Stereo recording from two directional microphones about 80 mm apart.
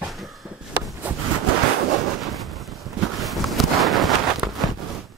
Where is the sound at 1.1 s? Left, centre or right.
Centre.